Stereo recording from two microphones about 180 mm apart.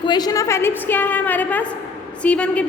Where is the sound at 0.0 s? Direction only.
25° left (ahead or behind).